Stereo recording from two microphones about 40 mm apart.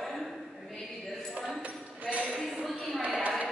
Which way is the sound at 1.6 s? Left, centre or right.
Right.